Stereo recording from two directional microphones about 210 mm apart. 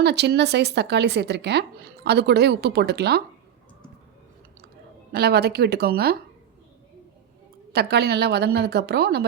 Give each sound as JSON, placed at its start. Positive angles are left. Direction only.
{"t": 0.0, "sound": "a woman's voice", "side_deg": -55}
{"t": 5.1, "sound": "a woman's voice", "side_deg": -50}
{"t": 7.7, "sound": "a woman's voice", "side_deg": -50}